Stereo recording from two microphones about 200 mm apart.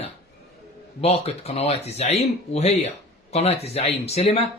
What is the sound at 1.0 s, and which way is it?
Speech, 30° left (ahead or behind).